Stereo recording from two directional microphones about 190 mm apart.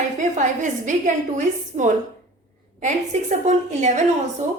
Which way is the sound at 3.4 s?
40° right (ahead or behind).